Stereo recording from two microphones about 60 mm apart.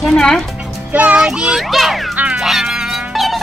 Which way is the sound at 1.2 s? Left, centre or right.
Centre.